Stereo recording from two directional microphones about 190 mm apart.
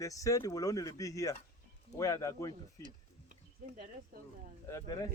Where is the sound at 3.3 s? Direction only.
40° right (ahead or behind).